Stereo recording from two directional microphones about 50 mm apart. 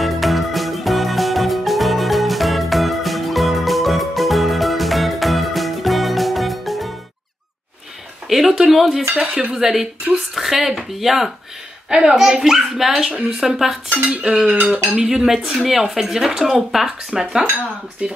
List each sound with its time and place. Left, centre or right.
0.0 s music: centre
8.3 s a sound: centre
9.2 s cutlery: right
9.5 s speech: centre
11.9 s cutlery: centre
12.2 s speech: centre
14.0 s cutlery: centre
14.5 s cutlery: right
15.0 s speech: centre
18.0 s cutlery: right